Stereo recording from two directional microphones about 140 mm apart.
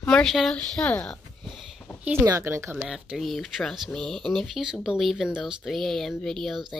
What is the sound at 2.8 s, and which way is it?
Speech, 5° right (ahead or behind).